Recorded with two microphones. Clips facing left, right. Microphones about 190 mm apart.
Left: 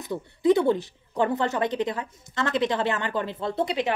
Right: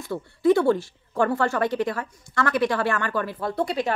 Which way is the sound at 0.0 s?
20° left (ahead or behind).